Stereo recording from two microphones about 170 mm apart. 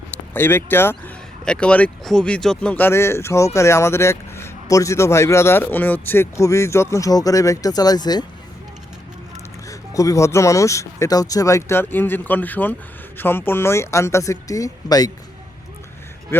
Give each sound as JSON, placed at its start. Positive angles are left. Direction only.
{"t": 0.3, "sound": "speech", "side_deg": 10}
{"t": 9.6, "sound": "speech", "side_deg": 20}
{"t": 16.3, "sound": "speech", "side_deg": 15}